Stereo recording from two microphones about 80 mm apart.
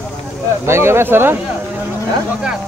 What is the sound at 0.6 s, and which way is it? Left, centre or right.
Speech, right.